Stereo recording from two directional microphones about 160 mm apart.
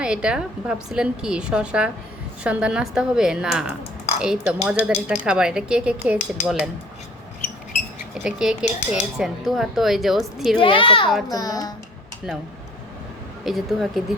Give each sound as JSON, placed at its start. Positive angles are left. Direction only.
{"t": 0.0, "sound": "speech", "side_deg": -5}
{"t": 8.2, "sound": "speech", "side_deg": -5}
{"t": 10.6, "sound": "a woman's voice", "side_deg": 35}
{"t": 13.4, "sound": "speech", "side_deg": 0}